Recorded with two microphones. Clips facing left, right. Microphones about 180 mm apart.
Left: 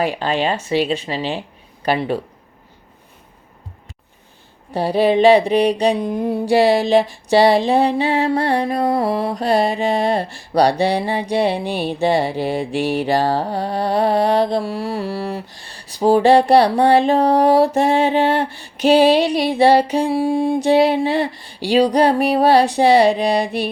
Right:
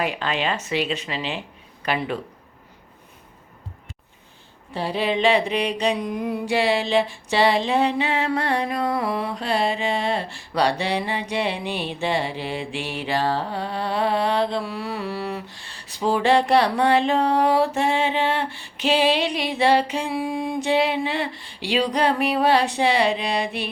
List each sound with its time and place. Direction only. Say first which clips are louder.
0.0 s music: left 5 dB; 35° left (ahead or behind)
4.7 s music: left 8 dB; 40° left (ahead or behind)